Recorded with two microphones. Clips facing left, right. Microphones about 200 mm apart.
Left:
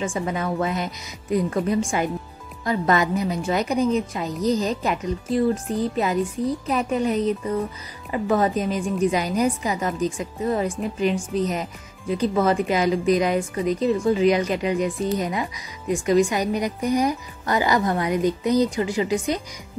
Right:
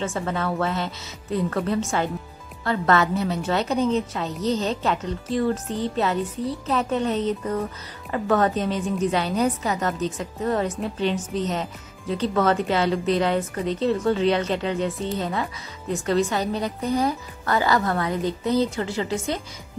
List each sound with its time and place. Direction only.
0.0 s speech: 15° left (ahead or behind)